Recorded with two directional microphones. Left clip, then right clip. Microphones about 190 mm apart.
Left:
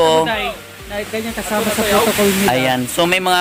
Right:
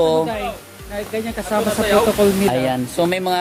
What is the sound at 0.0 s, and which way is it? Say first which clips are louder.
Speech: left 3 dB; 15° left (ahead or behind).